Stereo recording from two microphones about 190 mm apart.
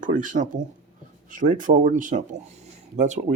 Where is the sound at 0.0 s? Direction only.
45° right (ahead or behind).